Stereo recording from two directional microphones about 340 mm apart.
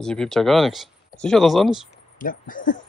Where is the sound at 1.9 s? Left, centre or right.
Left.